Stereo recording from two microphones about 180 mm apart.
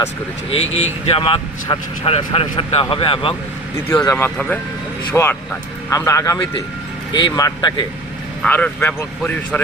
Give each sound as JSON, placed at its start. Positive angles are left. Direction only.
{"t": 0.6, "sound": "speech", "side_deg": 90}
{"t": 1.1, "sound": "a man's voice", "side_deg": 30}
{"t": 4.1, "sound": "speech", "side_deg": 10}
{"t": 8.4, "sound": "speech", "side_deg": 10}